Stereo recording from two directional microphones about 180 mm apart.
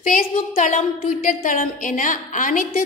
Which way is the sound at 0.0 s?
50° left (ahead or behind).